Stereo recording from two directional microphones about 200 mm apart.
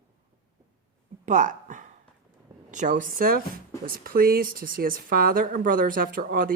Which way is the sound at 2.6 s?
40° right (ahead or behind).